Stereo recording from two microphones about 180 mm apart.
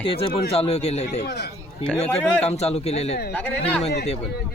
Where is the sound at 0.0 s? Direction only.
30° left (ahead or behind).